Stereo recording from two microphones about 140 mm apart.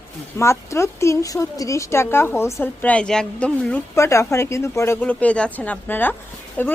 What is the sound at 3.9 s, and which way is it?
Speech, 20° left (ahead or behind).